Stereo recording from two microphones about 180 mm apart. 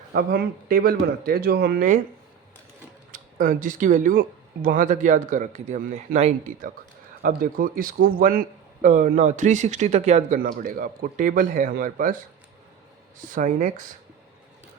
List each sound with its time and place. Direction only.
0.1 s speech: 55° right (ahead or behind)
3.1 s a man's voice: 45° right (ahead or behind)
7.2 s a man's voice: 50° right (ahead or behind)
13.2 s a man's voice: 45° right (ahead or behind)